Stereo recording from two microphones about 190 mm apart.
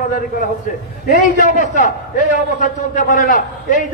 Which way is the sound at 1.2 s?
40° left (ahead or behind).